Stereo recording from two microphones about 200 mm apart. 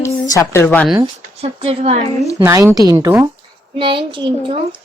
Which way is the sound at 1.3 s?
30° right (ahead or behind).